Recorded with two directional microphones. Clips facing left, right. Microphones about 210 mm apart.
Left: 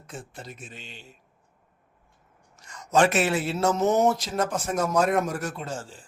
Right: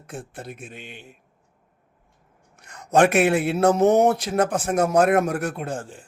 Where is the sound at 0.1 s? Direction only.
60° right (ahead or behind).